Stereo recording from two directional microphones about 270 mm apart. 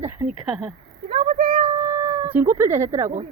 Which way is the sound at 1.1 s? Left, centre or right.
Right.